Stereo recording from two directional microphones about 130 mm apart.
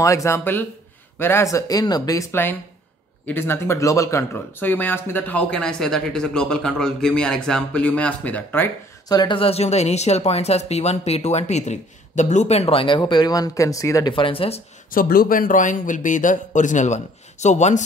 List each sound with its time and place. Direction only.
0.0 s speech: 25° left (ahead or behind)
9.1 s speech: 30° left (ahead or behind)
9.4 s speech: 50° left (ahead or behind); by 14.1 s 25° left (ahead or behind)
14.1 s speech: 45° left (ahead or behind)
14.9 s speech: 90° left; by 17.8 s 65° left (ahead or behind)